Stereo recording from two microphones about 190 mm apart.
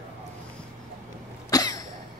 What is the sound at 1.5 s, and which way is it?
Cough, 20° left (ahead or behind).